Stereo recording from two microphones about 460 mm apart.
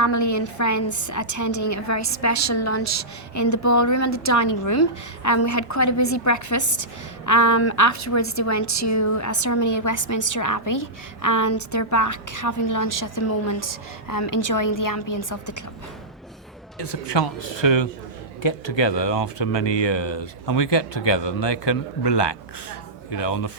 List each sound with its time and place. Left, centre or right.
0.0 s a woman's voice: left
16.7 s a man's voice: left